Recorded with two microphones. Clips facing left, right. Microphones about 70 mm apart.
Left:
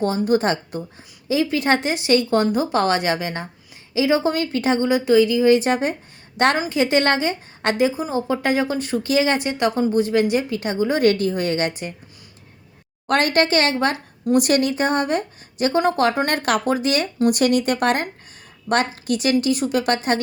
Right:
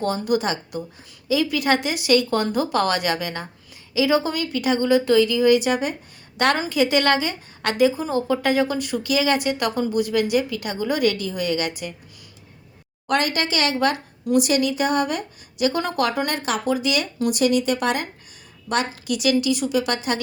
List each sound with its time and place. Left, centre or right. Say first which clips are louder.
0.0 s speech: left 3 dB; left
0.3 s a woman's voice: left 3 dB; left
4.9 s a woman's voice: left 1 dB; left
11.0 s a woman's voice: left 4 dB; left
13.1 s a woman's voice: left 4 dB; left
14.3 s a woman's voice: left 1 dB; left
16.2 s speech: left 4 dB; left
16.7 s a woman's voice: left 2 dB; left